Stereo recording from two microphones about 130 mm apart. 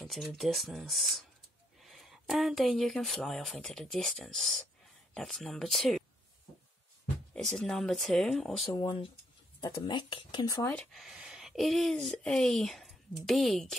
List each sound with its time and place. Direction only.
0.0 s speech: centre (ahead or behind)
7.3 s speech: centre (ahead or behind)
8.7 s speech: 35° left (ahead or behind)
10.7 s speech: 5° left (ahead or behind)